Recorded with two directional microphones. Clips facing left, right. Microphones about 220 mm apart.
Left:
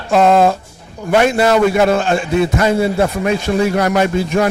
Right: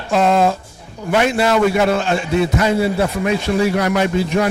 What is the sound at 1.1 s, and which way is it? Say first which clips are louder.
A man's voice: left 3 dB; 45° left (ahead or behind).